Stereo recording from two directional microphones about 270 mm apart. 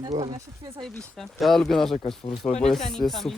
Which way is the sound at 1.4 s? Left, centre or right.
Centre.